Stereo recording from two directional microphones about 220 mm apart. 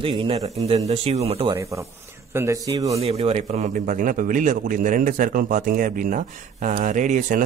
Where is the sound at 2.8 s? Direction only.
30° right (ahead or behind).